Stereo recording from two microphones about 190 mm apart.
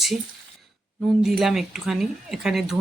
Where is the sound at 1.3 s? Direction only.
Centre (ahead or behind).